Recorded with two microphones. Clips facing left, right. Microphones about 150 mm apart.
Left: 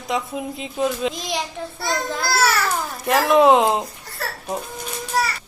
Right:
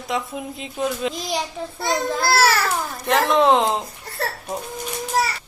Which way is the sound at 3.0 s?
5° left (ahead or behind).